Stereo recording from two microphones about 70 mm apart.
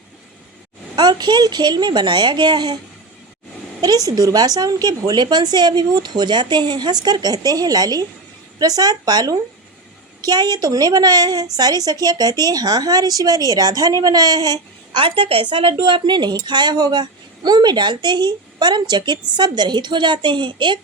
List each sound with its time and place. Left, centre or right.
0.9 s speech: right
3.8 s a woman's voice: right
15.4 s speech: right